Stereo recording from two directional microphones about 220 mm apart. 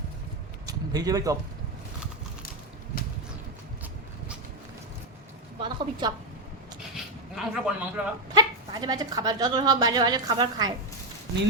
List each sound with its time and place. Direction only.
0.7 s a man's voice: 15° right (ahead or behind)
5.5 s speech: 20° right (ahead or behind)
6.9 s a sound: centre (ahead or behind)
8.3 s speech: 20° right (ahead or behind)